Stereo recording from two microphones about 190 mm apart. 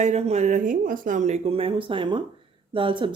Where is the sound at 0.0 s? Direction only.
35° right (ahead or behind).